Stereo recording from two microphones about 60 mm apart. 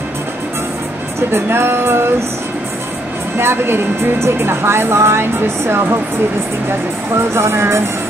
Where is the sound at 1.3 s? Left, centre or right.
Right.